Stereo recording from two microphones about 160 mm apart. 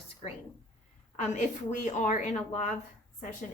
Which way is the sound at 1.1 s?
50° left (ahead or behind).